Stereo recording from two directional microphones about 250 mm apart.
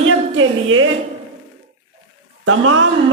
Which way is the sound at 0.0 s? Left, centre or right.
Right.